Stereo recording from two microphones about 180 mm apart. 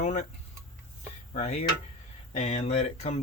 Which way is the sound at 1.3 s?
35° left (ahead or behind).